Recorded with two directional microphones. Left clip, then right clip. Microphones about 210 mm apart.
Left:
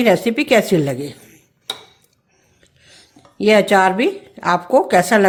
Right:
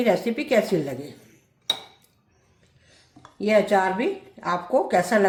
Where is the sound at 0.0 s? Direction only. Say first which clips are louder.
Left 7 dB; 40° left (ahead or behind).